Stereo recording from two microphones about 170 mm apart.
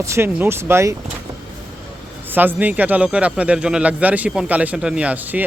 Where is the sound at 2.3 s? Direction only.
10° right (ahead or behind).